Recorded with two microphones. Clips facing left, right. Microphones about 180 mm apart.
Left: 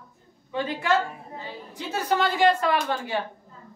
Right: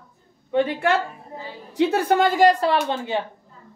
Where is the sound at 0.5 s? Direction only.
60° right (ahead or behind); by 3.1 s 25° right (ahead or behind).